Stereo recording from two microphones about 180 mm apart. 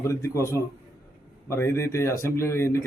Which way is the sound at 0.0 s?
15° left (ahead or behind).